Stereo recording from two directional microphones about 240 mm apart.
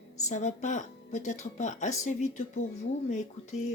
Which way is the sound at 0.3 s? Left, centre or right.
Left.